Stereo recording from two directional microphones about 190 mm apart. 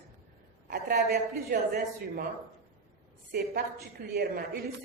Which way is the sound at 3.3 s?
50° right (ahead or behind).